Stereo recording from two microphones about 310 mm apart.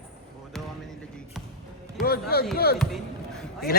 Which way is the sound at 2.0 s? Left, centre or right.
Left.